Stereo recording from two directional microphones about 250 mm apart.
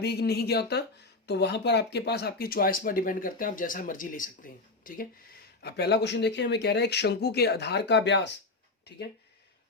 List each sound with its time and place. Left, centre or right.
0.0 s speech: left